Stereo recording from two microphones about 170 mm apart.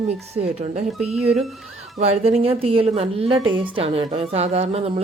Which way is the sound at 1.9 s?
40° right (ahead or behind).